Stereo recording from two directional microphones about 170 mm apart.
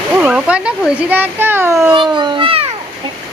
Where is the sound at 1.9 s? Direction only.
30° right (ahead or behind).